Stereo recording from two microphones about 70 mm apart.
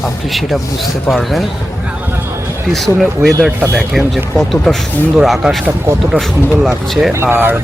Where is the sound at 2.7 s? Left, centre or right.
Centre.